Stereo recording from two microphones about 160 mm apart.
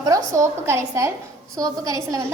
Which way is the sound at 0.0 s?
20° right (ahead or behind).